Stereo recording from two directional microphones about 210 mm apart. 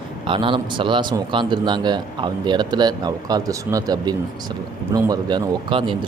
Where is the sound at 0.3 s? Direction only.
25° right (ahead or behind).